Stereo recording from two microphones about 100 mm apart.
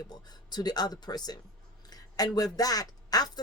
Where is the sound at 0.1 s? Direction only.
45° left (ahead or behind).